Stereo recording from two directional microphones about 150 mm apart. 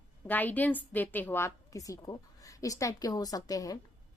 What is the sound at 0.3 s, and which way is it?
A woman's voice, 10° left (ahead or behind).